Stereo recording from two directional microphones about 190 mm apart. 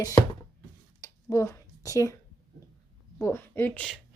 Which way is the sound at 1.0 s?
15° left (ahead or behind).